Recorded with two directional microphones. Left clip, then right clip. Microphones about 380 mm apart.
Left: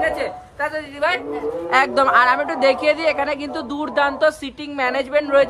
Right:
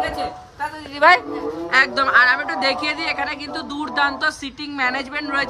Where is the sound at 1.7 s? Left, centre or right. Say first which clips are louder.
Even; centre.